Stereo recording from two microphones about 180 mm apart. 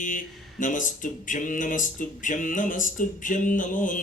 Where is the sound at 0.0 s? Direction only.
45° left (ahead or behind).